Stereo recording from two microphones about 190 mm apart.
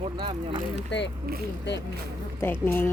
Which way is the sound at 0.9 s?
65° left (ahead or behind).